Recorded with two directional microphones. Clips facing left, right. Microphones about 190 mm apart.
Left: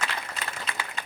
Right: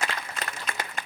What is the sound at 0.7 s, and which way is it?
Applause, 50° right (ahead or behind).